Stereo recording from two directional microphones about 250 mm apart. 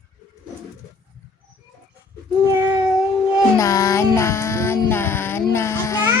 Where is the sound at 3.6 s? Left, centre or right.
Centre.